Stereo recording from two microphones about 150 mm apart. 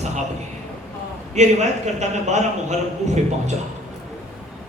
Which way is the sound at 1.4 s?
50° right (ahead or behind).